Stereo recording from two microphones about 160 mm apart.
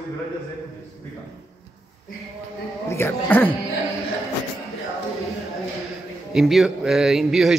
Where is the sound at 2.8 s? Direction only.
15° left (ahead or behind).